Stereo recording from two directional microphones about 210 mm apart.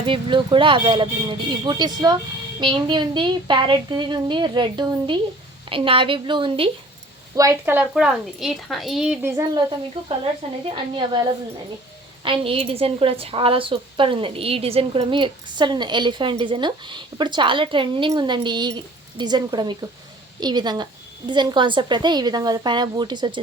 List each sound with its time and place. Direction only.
0.0 s a woman's voice: 25° right (ahead or behind)
10.0 s a woman's voice: 25° right (ahead or behind)
12.2 s a woman's voice: 25° right (ahead or behind)